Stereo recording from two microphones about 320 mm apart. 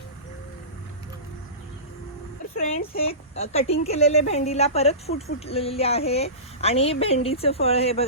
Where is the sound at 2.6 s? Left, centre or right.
Centre.